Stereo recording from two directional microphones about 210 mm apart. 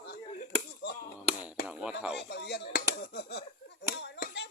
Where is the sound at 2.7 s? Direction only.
50° left (ahead or behind).